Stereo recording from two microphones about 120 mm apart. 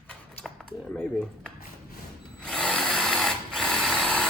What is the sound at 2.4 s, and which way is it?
Sewing machine, 5° left (ahead or behind).